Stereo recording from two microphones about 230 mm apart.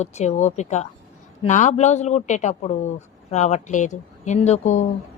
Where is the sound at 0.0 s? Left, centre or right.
Left.